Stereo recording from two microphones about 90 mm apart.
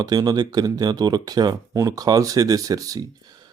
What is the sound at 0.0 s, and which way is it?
Speech, 45° right (ahead or behind).